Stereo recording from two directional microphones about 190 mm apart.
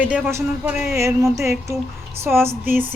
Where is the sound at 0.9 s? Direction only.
15° right (ahead or behind).